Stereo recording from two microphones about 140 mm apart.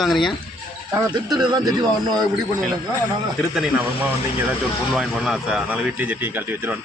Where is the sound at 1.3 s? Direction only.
30° right (ahead or behind).